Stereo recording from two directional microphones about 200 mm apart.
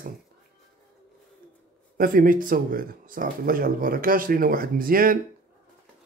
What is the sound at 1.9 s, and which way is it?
Speech, 45° right (ahead or behind).